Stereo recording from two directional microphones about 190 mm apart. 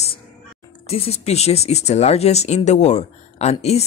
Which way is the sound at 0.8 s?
30° left (ahead or behind).